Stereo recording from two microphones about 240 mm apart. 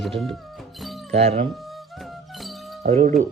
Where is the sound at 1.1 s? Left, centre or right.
Right.